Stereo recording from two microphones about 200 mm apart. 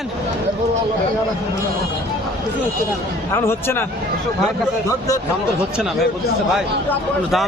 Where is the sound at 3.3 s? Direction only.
10° left (ahead or behind).